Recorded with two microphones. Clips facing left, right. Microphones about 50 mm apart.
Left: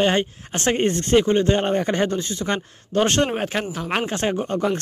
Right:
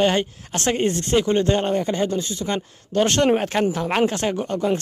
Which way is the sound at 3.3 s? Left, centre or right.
Centre.